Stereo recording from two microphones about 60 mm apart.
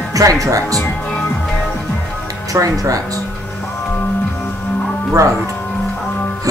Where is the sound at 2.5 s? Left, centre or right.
Right.